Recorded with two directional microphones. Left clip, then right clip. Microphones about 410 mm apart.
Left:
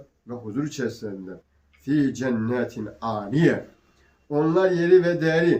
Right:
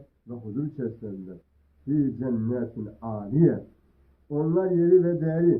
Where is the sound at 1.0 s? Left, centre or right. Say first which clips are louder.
Left 5 dB; centre.